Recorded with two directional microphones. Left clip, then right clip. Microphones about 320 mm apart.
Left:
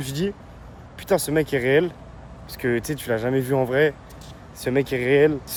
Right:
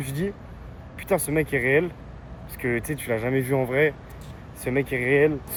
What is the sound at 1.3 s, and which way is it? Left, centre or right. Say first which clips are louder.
Speech: left 1 dB; centre.